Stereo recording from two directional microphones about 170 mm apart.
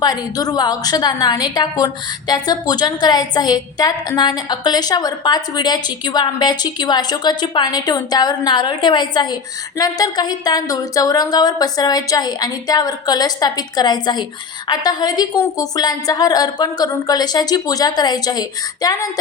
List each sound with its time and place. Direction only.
0.0 s a woman's voice: 25° left (ahead or behind)